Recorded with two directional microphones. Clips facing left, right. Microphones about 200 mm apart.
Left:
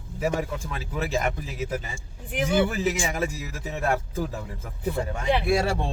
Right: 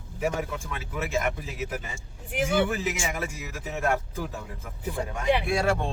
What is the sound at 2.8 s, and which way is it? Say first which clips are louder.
Speech: left 4 dB; 35° left (ahead or behind).